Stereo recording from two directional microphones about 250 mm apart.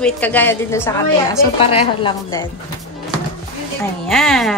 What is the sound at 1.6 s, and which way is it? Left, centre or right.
Speech, left.